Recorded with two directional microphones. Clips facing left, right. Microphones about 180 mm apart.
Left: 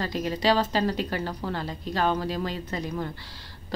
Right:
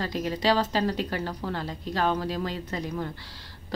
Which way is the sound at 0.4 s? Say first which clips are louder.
Left 1 dB; 15° left (ahead or behind).